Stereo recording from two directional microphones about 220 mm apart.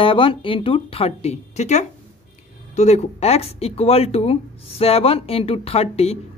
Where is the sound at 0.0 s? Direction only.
25° left (ahead or behind).